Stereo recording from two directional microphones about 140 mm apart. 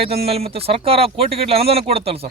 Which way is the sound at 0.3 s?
45° right (ahead or behind).